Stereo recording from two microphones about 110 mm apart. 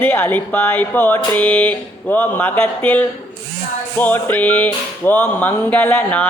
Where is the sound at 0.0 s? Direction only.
15° left (ahead or behind).